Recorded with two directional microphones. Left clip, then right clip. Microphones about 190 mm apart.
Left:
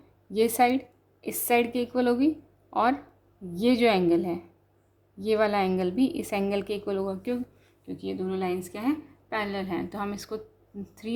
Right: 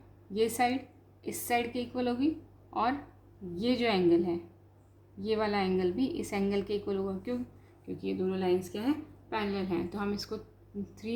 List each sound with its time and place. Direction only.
0.3 s a woman's voice: 45° left (ahead or behind)